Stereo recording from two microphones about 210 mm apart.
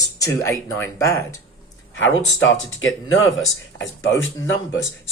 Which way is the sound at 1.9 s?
65° left (ahead or behind).